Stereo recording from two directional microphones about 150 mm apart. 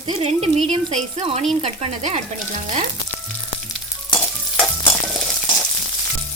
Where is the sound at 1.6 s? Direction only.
45° right (ahead or behind).